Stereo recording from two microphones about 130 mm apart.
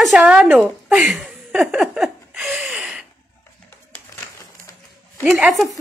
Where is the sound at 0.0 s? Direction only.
10° right (ahead or behind).